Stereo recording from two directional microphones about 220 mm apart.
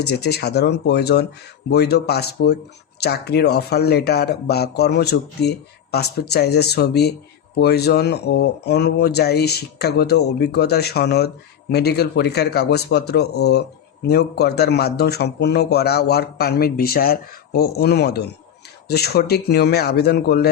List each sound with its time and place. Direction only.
0.0 s a man's voice: 50° left (ahead or behind)